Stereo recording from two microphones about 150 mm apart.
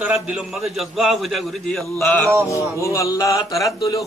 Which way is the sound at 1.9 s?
5° left (ahead or behind).